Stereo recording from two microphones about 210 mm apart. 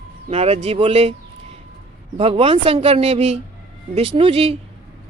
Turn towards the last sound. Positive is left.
turn(degrees=-30)  # may be behind; listen again after turning